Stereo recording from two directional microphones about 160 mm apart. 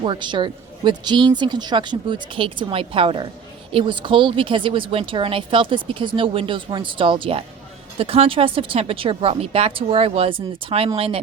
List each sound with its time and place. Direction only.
0.0 s speech: 30° right (ahead or behind)